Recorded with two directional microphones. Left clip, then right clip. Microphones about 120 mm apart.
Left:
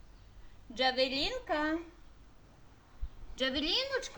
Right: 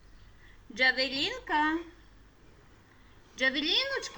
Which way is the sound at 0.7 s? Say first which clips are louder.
Right 3 dB; 55° left (ahead or behind).